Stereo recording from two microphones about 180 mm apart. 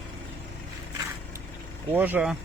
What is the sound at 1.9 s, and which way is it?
Speech, 10° right (ahead or behind).